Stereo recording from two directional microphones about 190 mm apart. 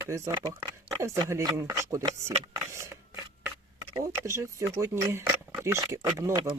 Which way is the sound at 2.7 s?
15° right (ahead or behind).